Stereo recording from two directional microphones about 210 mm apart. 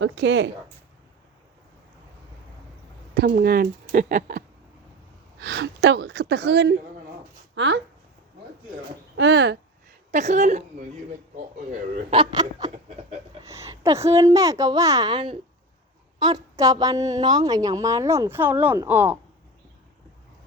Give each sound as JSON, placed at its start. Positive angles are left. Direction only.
{"t": 0.0, "sound": "speech", "side_deg": -60}
{"t": 3.2, "sound": "speech", "side_deg": -50}
{"t": 5.4, "sound": "speech", "side_deg": -55}
{"t": 9.1, "sound": "speech", "side_deg": -55}
{"t": 10.1, "sound": "speech", "side_deg": -35}
{"t": 12.1, "sound": "a woman's voice", "side_deg": -20}